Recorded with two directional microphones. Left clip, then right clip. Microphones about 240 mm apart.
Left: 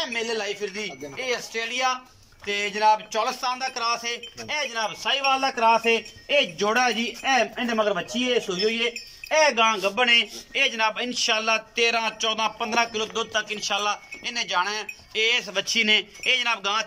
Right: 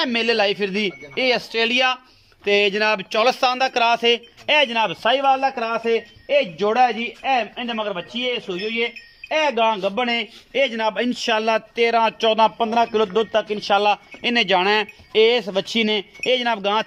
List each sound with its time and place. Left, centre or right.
0.0 s a man's voice: right